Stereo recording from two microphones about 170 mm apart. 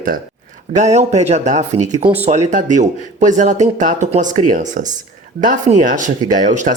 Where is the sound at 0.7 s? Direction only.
45° right (ahead or behind).